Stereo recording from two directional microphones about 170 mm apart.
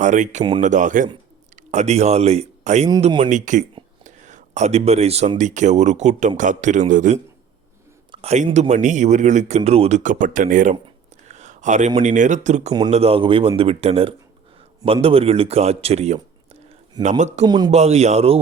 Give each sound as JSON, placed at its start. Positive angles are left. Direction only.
{"t": 0.0, "sound": "a man's voice", "side_deg": -45}
{"t": 10.8, "sound": "a sound", "side_deg": -40}
{"t": 11.9, "sound": "speech", "side_deg": -50}
{"t": 17.4, "sound": "a man's voice", "side_deg": -25}
{"t": 17.7, "sound": "speech", "side_deg": -40}